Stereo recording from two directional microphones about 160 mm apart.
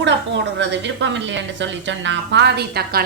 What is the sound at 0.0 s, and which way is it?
A woman's voice, 90° right.